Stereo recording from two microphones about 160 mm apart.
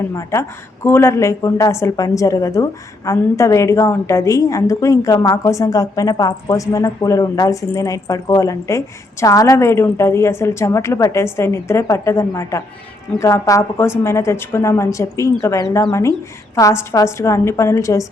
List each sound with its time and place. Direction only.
0.1 s a woman's voice: 20° left (ahead or behind)